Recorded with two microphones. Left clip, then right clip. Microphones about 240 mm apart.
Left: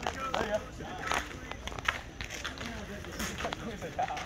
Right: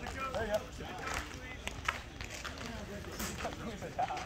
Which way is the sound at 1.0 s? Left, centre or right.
Left.